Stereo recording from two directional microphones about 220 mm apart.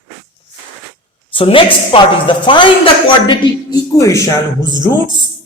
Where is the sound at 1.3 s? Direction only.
25° left (ahead or behind).